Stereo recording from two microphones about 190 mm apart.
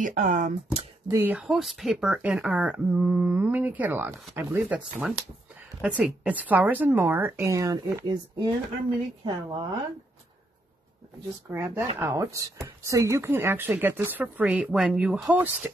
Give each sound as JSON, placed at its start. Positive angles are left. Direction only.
{"t": 0.0, "sound": "speech", "side_deg": -40}
{"t": 1.0, "sound": "a woman's voice", "side_deg": -15}
{"t": 11.5, "sound": "speech", "side_deg": -15}